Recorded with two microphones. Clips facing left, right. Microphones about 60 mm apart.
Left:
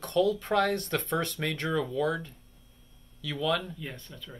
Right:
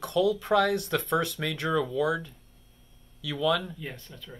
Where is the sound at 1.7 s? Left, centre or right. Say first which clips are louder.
Right 4 dB; centre.